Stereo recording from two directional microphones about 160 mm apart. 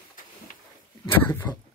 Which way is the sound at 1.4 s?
10° left (ahead or behind).